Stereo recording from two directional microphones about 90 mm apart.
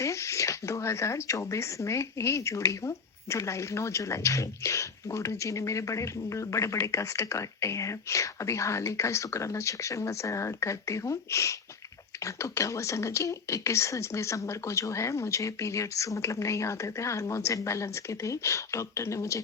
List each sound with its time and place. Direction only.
0.0 s speech: 35° left (ahead or behind)